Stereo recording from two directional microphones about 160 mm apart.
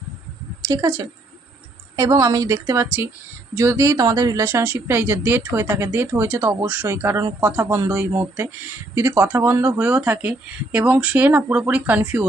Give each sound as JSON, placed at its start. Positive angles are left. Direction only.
{"t": 0.7, "sound": "a woman's voice", "side_deg": -20}